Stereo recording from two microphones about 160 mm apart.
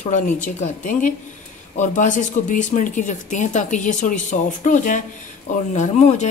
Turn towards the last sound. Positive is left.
turn(degrees=45)  # may be behind; listen again after turning